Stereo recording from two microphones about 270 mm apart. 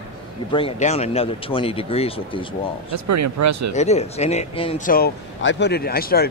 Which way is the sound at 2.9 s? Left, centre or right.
Right.